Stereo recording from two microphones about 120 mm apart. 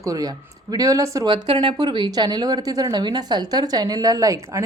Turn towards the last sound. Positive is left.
turn(degrees=-25)  # may be behind; listen again after turning